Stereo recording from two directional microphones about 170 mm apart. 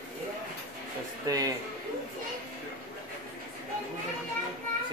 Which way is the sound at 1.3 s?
20° right (ahead or behind).